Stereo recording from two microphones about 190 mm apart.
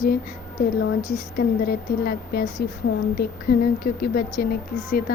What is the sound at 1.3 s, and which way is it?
A woman's voice, 55° left (ahead or behind).